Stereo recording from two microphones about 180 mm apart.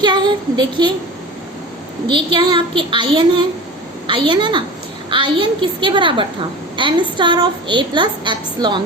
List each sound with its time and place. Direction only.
0.0 s child singing: 25° right (ahead or behind)
2.0 s a woman's voice: 25° right (ahead or behind)